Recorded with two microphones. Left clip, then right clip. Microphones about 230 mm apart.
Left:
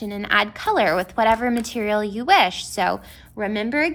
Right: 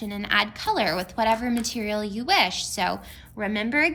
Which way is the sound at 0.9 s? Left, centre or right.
Centre.